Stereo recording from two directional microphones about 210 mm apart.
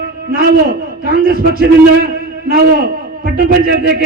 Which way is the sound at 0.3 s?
45° right (ahead or behind).